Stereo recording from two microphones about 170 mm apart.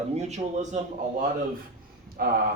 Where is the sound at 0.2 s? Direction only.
45° right (ahead or behind).